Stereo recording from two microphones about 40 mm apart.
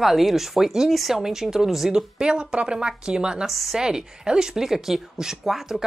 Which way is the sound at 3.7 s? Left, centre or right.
Centre.